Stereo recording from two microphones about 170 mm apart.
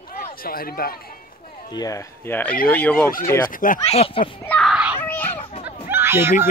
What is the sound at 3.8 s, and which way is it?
Speech, 35° left (ahead or behind).